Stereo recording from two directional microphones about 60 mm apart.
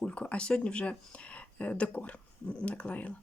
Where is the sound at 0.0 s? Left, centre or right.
Centre.